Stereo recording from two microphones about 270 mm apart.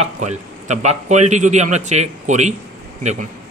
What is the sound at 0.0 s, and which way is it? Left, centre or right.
A man's voice, right.